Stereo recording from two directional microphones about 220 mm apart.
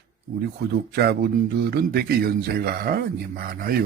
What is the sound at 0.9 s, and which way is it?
Speech, 45° right (ahead or behind).